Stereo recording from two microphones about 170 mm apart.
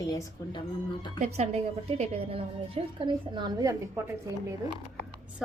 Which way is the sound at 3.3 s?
25° right (ahead or behind).